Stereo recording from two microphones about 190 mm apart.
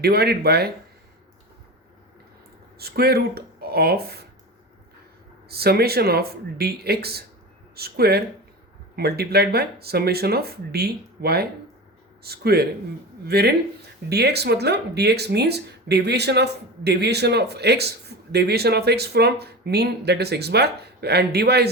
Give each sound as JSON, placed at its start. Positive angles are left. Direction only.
{"t": 0.0, "sound": "speech", "side_deg": -55}
{"t": 2.7, "sound": "speech", "side_deg": -55}
{"t": 5.5, "sound": "speech", "side_deg": -55}